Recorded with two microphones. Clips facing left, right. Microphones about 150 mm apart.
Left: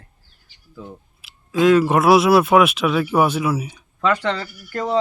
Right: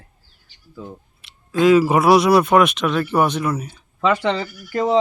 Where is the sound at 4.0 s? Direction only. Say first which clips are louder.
Right 2 dB; 10° right (ahead or behind).